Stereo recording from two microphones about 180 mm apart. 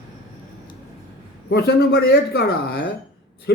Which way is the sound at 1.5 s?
65° left (ahead or behind).